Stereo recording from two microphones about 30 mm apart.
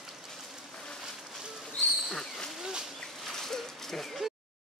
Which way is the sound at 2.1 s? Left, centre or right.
Centre.